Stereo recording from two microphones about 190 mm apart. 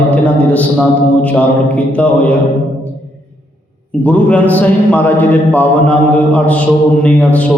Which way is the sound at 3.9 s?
5° left (ahead or behind).